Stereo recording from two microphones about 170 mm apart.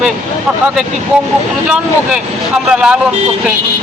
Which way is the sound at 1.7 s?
5° right (ahead or behind).